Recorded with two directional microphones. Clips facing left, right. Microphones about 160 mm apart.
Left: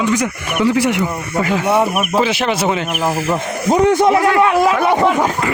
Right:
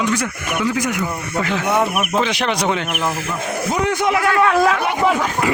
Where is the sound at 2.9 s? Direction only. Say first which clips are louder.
Left 5 dB; 35° left (ahead or behind).